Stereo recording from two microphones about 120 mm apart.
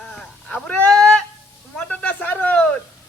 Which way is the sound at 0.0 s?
5° left (ahead or behind).